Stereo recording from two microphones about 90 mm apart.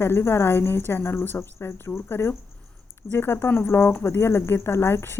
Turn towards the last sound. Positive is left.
turn(degrees=25)  # may be behind; listen again after turning